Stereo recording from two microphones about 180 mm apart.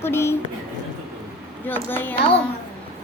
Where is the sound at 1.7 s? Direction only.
10° left (ahead or behind).